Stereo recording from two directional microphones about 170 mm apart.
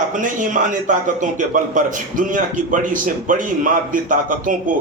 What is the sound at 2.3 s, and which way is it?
Speech, 50° right (ahead or behind).